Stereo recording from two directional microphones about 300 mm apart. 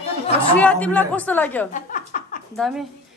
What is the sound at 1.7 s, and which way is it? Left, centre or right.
Chuckle, left.